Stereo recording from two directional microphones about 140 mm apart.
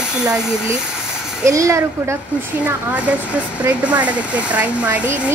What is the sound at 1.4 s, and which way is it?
Speech, 20° right (ahead or behind).